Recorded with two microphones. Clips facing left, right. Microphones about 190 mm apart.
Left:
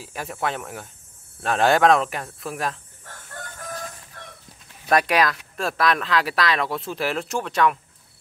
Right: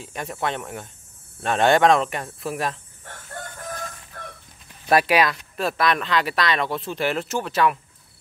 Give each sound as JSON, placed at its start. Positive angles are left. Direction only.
{"t": 0.0, "sound": "speech", "side_deg": 5}
{"t": 4.1, "sound": "chicken", "side_deg": -45}
{"t": 4.8, "sound": "speech", "side_deg": -5}